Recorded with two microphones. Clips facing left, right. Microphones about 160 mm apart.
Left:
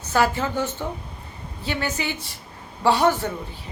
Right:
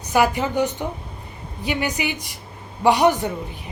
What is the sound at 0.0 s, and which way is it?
A woman's voice, 15° right (ahead or behind).